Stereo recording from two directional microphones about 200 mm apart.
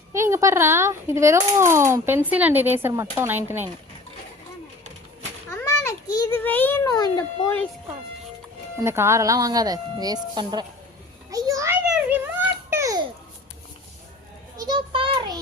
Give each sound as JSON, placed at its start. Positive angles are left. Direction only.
{"t": 0.1, "sound": "a child's voice", "side_deg": -15}
{"t": 5.5, "sound": "a sound", "side_deg": 15}
{"t": 8.8, "sound": "a woman's voice", "side_deg": -15}
{"t": 11.3, "sound": "a sound", "side_deg": -15}
{"t": 11.9, "sound": "babbling", "side_deg": -10}
{"t": 14.7, "sound": "child singing", "side_deg": -25}